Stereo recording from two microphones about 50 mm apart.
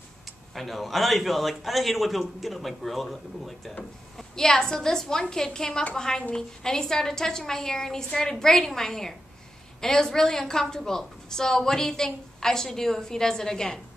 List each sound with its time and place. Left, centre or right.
0.6 s a man's voice: centre